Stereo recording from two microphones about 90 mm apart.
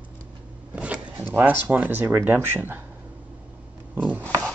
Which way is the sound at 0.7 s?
15° right (ahead or behind).